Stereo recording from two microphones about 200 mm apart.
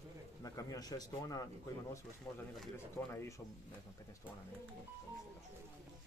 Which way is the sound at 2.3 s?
10° left (ahead or behind).